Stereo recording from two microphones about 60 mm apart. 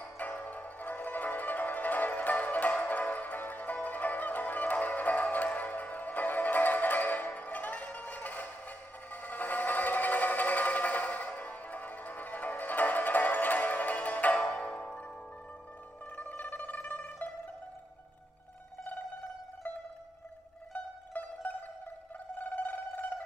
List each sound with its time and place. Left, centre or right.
0.0 s music: left
16.2 s zither: left
20.7 s mandolin: left
22.4 s music: left